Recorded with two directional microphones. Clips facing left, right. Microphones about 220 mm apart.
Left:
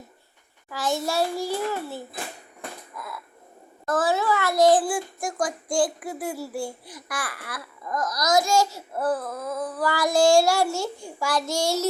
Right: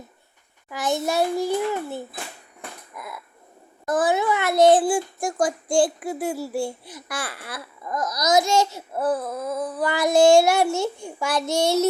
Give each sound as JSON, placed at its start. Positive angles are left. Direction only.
{"t": 0.7, "sound": "speech", "side_deg": -20}
{"t": 2.9, "sound": "a sound", "side_deg": -20}
{"t": 3.8, "sound": "speech", "side_deg": -15}